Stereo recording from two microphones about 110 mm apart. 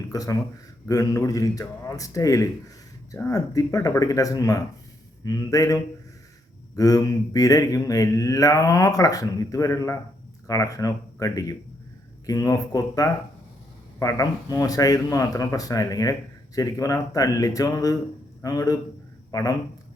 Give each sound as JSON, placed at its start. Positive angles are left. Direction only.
{"t": 0.1, "sound": "mantra", "side_deg": 30}
{"t": 19.3, "sound": "speech", "side_deg": 35}